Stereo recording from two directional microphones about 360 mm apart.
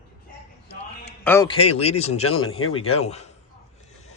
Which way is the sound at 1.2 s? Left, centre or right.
Centre.